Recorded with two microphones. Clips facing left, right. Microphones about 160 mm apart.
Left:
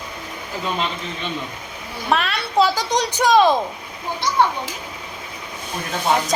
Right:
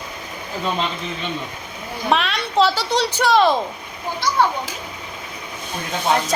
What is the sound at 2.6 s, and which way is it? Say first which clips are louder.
A woman's voice: even; 15° left (ahead or behind).